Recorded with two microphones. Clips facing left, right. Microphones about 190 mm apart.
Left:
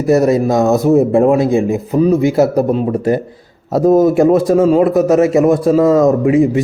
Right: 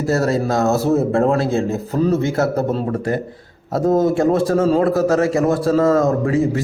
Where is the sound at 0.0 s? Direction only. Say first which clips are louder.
Left 7 dB; 20° left (ahead or behind).